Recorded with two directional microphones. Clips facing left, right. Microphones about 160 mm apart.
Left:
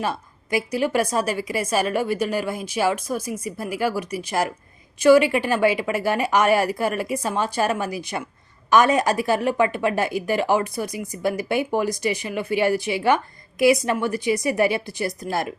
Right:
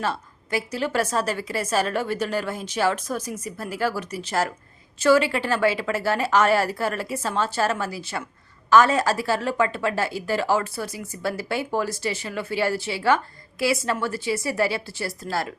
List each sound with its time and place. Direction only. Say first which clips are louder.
0.0 s a woman's voice: left 1 dB; 15° left (ahead or behind)